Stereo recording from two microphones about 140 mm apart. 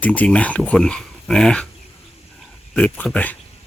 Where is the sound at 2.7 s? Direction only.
5° left (ahead or behind).